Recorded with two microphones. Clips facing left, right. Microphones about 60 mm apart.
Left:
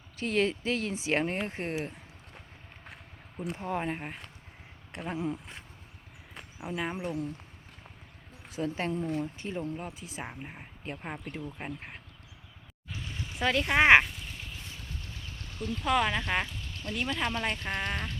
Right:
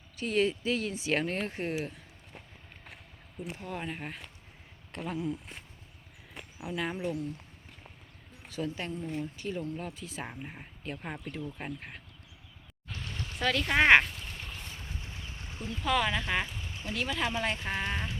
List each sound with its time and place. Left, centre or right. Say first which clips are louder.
0.2 s speech: even; left
3.3 s speech: left 5 dB; left
4.9 s speech: left 1 dB; left
6.6 s speech: even; left
8.6 s speech: left 5 dB; left
9.7 s speech: even; centre
12.9 s a sound: even; centre
13.7 s speech: left 1 dB; centre
14.1 s a sound: even; centre
14.8 s clip-clop: even; right
15.8 s speech: left 1 dB; centre
16.5 s a sound: even; centre
16.9 s speech: even; centre